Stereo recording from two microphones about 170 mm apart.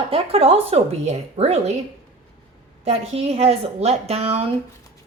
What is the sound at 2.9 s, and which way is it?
A woman's voice, 40° right (ahead or behind).